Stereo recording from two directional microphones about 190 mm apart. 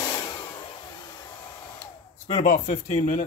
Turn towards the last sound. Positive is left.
turn(degrees=40)  # may be behind; listen again after turning